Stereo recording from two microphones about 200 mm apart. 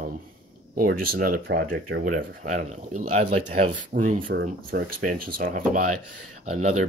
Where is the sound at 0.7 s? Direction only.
45° right (ahead or behind).